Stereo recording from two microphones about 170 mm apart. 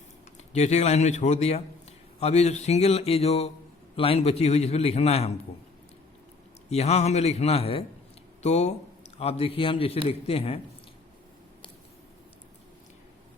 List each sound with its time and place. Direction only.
0.5 s a man's voice: 40° left (ahead or behind)
6.7 s a man's voice: 40° left (ahead or behind)